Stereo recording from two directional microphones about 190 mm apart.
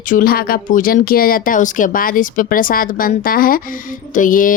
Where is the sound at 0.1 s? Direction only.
50° left (ahead or behind).